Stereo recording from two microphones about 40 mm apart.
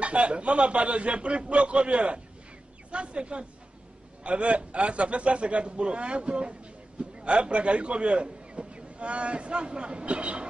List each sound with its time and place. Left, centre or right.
0.0 s a man's voice: right